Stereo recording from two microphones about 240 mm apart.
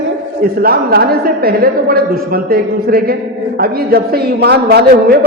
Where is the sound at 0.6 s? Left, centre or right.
Right.